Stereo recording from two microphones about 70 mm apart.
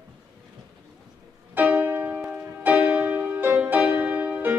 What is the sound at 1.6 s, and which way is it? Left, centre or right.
Music, right.